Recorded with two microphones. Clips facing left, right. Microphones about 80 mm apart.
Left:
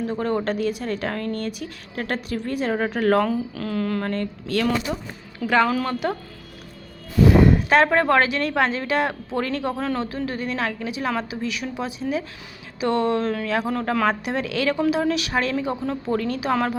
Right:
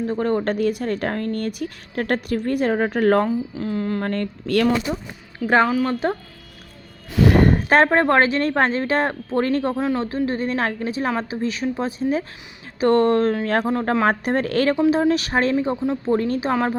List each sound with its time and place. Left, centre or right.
0.1 s speech: right
3.7 s speech: right
4.1 s speech: right
5.6 s speech: centre
7.1 s a sound: right
7.9 s speech: right
9.7 s speech: centre; by 13.7 s right
13.7 s speech: right
14.1 s speech: right
16.5 s speech: right